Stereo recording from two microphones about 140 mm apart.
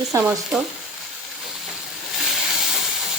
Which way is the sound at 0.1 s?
20° right (ahead or behind).